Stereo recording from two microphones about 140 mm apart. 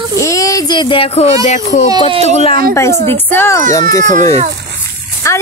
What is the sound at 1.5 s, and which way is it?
Speech, 60° left (ahead or behind).